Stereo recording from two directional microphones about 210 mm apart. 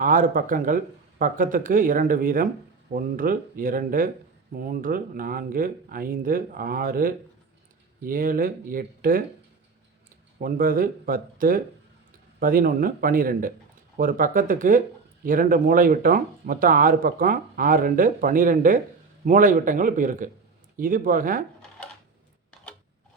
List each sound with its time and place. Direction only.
0.0 s speech: 40° right (ahead or behind)
10.3 s speech: 45° right (ahead or behind)